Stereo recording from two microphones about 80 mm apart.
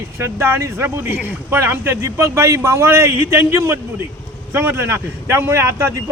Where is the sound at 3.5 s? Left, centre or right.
Right.